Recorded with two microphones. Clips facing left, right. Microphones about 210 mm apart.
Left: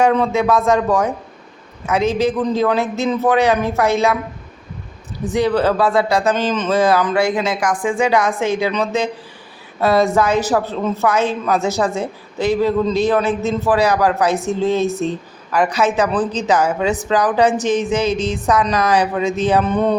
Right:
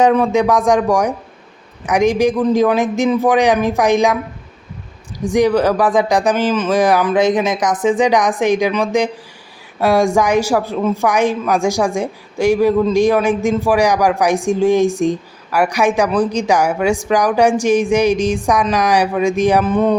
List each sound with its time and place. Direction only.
0.0 s a woman's voice: 15° right (ahead or behind)
5.2 s a woman's voice: 15° right (ahead or behind)